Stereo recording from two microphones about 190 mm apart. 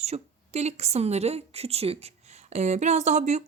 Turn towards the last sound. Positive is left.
turn(degrees=-35)  # may be behind; listen again after turning